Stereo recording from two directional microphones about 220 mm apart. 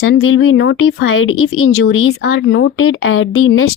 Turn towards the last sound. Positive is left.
turn(degrees=70)  # may be behind; listen again after turning